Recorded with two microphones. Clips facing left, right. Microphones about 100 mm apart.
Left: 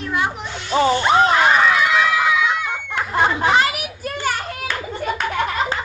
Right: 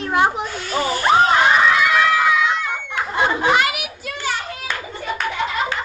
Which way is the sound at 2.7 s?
Centre (ahead or behind).